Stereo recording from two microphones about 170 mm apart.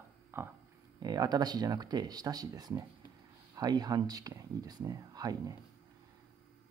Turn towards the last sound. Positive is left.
turn(degrees=-20)  # may be behind; listen again after turning